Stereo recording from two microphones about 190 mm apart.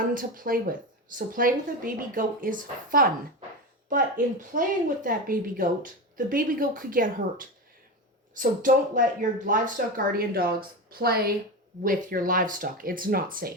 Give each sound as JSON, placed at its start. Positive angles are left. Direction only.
{"t": 0.0, "sound": "speech", "side_deg": -45}